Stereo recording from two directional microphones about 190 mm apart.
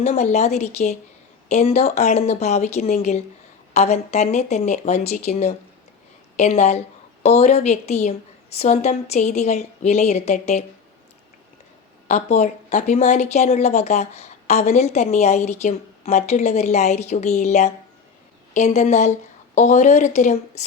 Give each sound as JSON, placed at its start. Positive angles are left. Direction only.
{"t": 0.0, "sound": "speech", "side_deg": 35}
{"t": 12.0, "sound": "speech", "side_deg": 35}